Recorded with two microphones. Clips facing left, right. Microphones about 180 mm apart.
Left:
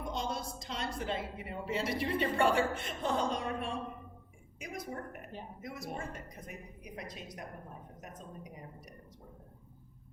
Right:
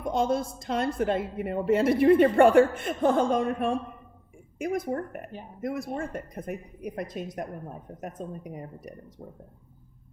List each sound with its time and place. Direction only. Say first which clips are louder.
0.1 s a woman's voice: right 14 dB; 55° right (ahead or behind)